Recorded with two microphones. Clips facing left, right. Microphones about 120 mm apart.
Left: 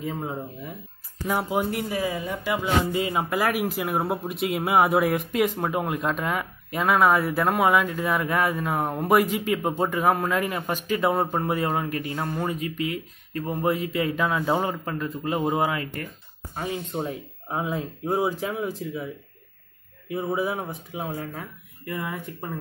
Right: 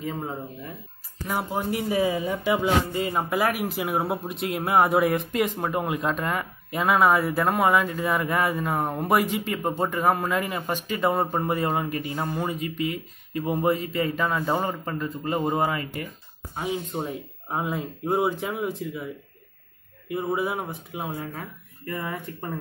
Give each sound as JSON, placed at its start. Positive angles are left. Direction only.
{"t": 0.0, "sound": "speech", "side_deg": 0}
{"t": 1.9, "sound": "speech", "side_deg": -15}
{"t": 2.1, "sound": "speech", "side_deg": 0}
{"t": 17.5, "sound": "speech", "side_deg": -15}
{"t": 18.0, "sound": "speech", "side_deg": 0}
{"t": 20.2, "sound": "speech", "side_deg": -5}
{"t": 21.8, "sound": "speech", "side_deg": 0}